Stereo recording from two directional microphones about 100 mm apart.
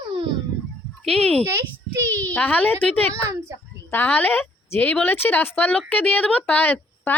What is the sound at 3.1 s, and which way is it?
Speech, 30° right (ahead or behind).